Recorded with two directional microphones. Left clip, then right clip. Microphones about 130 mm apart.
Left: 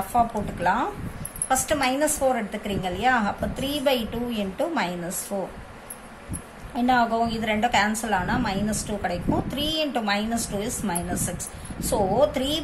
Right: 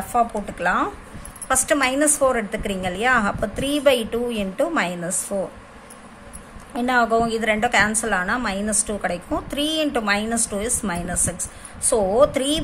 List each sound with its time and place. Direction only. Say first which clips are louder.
0.6 s a woman's voice: right 2 dB; 65° right (ahead or behind)
6.7 s a woman's voice: right 3 dB; 60° right (ahead or behind)